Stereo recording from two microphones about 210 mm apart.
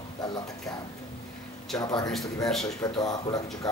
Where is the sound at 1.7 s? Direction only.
20° left (ahead or behind).